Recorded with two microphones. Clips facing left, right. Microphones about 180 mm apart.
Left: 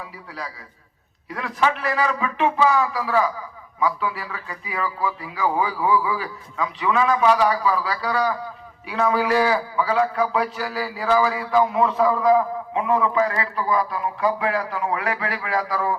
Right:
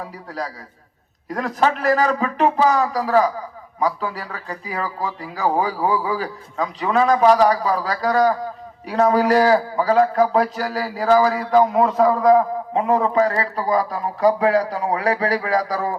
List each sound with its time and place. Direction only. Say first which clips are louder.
0.0 s a man's voice: right 5 dB; 40° right (ahead or behind)